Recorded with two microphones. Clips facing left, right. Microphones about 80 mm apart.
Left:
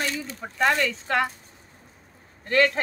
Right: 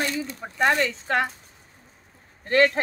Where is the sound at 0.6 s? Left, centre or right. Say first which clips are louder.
Right 1 dB; right.